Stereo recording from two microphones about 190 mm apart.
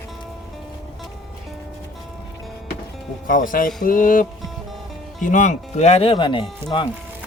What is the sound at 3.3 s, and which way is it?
Speech, 45° left (ahead or behind).